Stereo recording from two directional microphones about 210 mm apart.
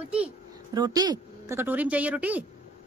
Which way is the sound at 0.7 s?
20° right (ahead or behind).